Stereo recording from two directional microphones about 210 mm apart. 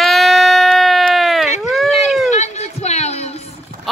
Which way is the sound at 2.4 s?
30° left (ahead or behind).